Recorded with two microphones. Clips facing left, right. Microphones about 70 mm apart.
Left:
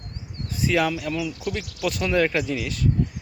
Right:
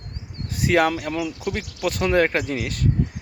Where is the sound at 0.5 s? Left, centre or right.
Right.